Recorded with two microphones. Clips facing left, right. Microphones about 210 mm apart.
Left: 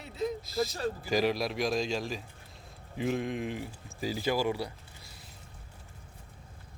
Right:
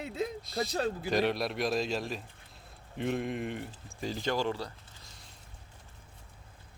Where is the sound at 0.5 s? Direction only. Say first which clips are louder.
Even; centre (ahead or behind).